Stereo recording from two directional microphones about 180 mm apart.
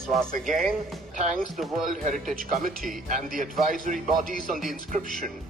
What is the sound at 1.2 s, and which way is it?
A man's voice, 45° right (ahead or behind).